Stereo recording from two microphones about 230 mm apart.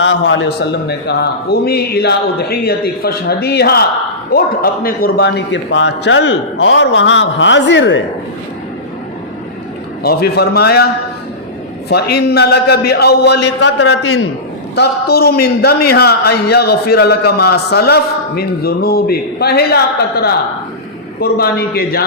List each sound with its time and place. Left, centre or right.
0.0 s a man's voice: left
10.0 s a man's voice: left
11.9 s a man's voice: left
13.8 s a man's voice: left
14.8 s a man's voice: left